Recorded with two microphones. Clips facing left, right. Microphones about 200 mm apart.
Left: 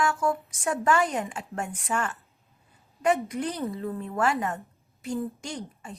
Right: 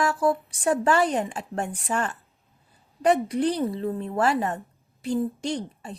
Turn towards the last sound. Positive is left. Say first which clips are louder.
# right 7 dB
turn(degrees=-35)  # may be behind; listen again after turning